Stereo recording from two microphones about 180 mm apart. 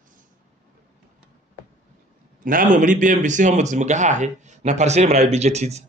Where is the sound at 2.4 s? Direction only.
45° right (ahead or behind).